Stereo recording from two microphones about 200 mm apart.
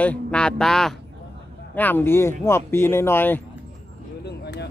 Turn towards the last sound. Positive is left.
turn(degrees=55)  # may be behind; listen again after turning